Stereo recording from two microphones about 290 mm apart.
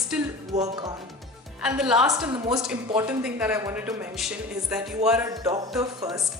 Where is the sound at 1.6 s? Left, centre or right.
Centre.